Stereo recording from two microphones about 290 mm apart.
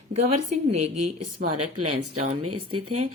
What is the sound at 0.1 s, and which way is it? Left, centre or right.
Speech, right.